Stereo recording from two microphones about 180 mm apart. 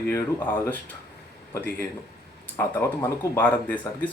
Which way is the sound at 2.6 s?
10° left (ahead or behind).